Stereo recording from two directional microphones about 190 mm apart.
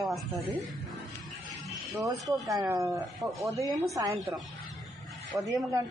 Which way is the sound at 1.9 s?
20° right (ahead or behind).